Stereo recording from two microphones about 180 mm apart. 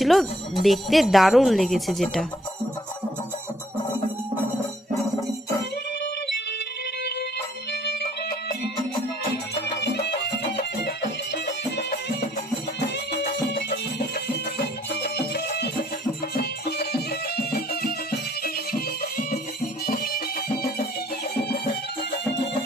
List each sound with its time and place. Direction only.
0.0 s speech: centre (ahead or behind)
7.7 s music: 65° left (ahead or behind)
9.8 s music: 70° left (ahead or behind)
13.1 s music: 65° left (ahead or behind)
14.8 s music: 65° left (ahead or behind)